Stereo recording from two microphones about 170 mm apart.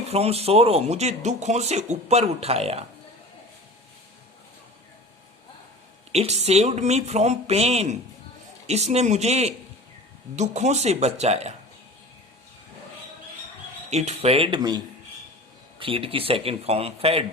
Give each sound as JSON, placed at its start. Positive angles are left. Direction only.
{"t": 0.1, "sound": "speech", "side_deg": -35}
{"t": 6.1, "sound": "speech", "side_deg": -40}
{"t": 13.9, "sound": "speech", "side_deg": -40}
{"t": 15.8, "sound": "speech", "side_deg": -30}